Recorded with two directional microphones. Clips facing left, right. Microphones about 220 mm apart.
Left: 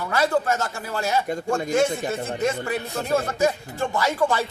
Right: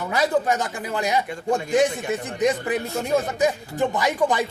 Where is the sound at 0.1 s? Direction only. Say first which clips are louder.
Right 1 dB; 15° right (ahead or behind).